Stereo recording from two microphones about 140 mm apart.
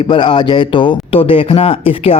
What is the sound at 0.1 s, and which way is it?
Speech, 35° left (ahead or behind).